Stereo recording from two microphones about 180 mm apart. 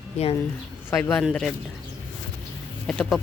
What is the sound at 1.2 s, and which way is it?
Speech, centre (ahead or behind).